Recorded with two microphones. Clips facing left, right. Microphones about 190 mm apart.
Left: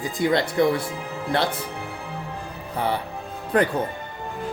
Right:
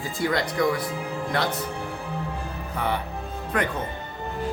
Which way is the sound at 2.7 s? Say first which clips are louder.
Left 2 dB; 30° left (ahead or behind).